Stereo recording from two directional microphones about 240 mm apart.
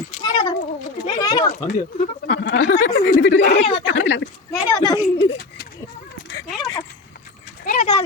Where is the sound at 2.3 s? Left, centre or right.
Left.